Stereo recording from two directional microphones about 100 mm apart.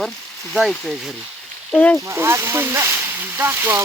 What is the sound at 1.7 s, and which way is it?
Speech, 15° left (ahead or behind).